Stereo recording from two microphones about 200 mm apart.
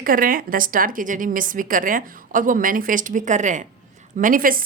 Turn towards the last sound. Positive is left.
turn(degrees=-45)  # may be behind; listen again after turning